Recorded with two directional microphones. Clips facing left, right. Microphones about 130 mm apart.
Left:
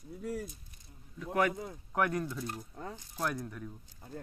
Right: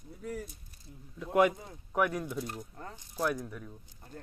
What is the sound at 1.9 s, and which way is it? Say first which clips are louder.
Speech: right 1 dB; 5° right (ahead or behind).